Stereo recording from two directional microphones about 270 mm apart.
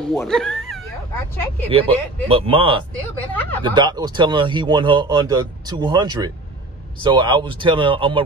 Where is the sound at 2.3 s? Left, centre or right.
Centre.